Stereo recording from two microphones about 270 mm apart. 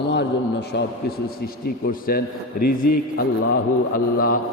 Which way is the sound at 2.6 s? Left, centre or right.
Left.